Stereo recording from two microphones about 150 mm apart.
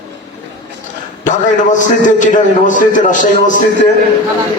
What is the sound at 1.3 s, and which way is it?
A man's voice, 55° left (ahead or behind).